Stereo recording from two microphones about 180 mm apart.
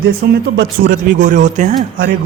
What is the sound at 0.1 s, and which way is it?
A man's voice, 60° right (ahead or behind).